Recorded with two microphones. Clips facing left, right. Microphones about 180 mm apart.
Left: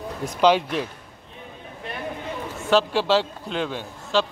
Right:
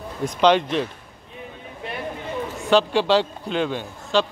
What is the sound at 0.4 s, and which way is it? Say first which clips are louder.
Speech: right 1 dB; 5° left (ahead or behind).